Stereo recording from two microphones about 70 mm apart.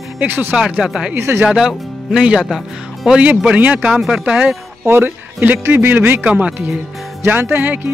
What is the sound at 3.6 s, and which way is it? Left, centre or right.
Speech, right.